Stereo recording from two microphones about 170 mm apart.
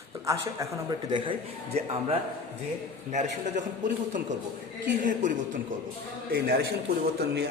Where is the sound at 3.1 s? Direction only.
45° right (ahead or behind).